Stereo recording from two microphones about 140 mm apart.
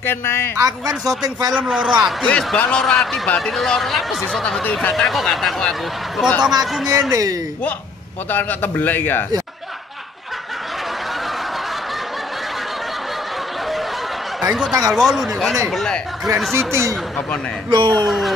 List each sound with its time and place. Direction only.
0.0 s a man's voice: 15° left (ahead or behind)
0.6 s speech: 25° right (ahead or behind)
1.5 s speech: 5° right (ahead or behind)
2.2 s speech: 10° left (ahead or behind)
6.9 s speech: 25° right (ahead or behind)
8.3 s a man's voice: 10° left (ahead or behind)
14.4 s speech: 5° right (ahead or behind)
16.5 s speech: 20° right (ahead or behind)
17.6 s speech: 35° right (ahead or behind)
18.0 s speech: centre (ahead or behind)